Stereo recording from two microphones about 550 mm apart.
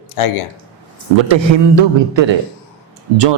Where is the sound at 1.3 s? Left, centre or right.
Right.